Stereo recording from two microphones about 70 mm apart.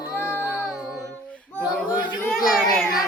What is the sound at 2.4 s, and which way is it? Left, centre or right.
Child singing, centre.